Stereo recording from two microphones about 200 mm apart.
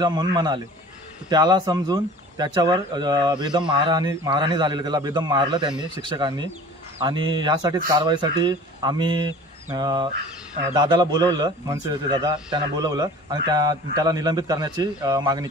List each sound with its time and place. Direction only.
0.0 s speech: 20° right (ahead or behind)